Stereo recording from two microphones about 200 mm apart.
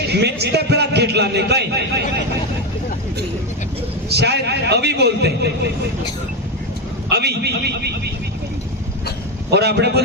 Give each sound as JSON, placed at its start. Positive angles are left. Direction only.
{"t": 0.1, "sound": "a man's voice", "side_deg": -55}
{"t": 4.1, "sound": "a man's voice", "side_deg": -55}
{"t": 7.1, "sound": "a man's voice", "side_deg": -55}
{"t": 9.5, "sound": "a man's voice", "side_deg": -55}